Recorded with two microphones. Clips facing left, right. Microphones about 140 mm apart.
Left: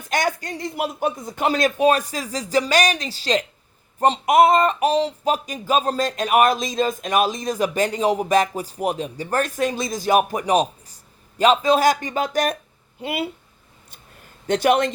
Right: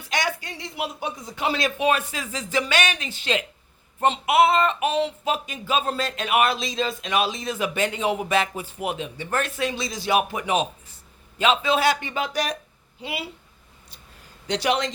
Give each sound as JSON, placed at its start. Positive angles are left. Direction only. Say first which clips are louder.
{"t": 0.0, "sound": "speech", "louder": "left 4 dB", "side_deg": 45}
{"t": 14.4, "sound": "speech", "louder": "left 6 dB", "side_deg": 50}